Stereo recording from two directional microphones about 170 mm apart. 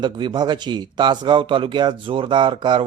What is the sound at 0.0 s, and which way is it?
Speech, 25° right (ahead or behind).